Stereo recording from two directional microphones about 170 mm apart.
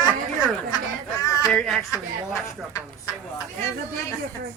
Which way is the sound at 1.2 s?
20° left (ahead or behind).